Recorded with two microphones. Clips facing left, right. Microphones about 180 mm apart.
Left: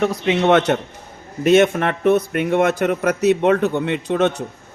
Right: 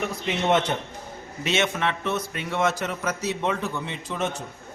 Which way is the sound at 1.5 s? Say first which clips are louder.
Left 11 dB; 55° left (ahead or behind).